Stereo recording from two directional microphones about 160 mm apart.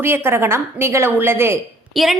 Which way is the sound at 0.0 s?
15° right (ahead or behind).